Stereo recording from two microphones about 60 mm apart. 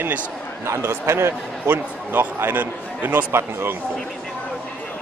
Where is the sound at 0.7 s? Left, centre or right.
Right.